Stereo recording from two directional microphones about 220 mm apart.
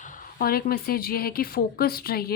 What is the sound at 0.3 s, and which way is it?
A woman's voice, 45° left (ahead or behind).